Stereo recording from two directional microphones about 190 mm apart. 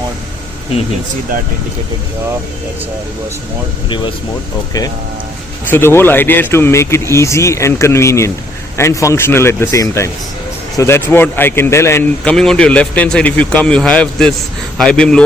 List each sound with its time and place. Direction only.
3.8 s speech: 25° left (ahead or behind)
5.7 s speech: 10° left (ahead or behind)